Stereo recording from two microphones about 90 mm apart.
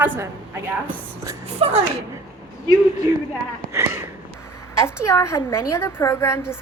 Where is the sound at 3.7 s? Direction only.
35° right (ahead or behind).